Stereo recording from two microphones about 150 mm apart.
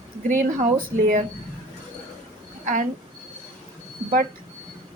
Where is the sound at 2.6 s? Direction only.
55° right (ahead or behind).